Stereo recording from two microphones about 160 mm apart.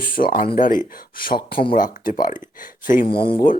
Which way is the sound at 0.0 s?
65° left (ahead or behind).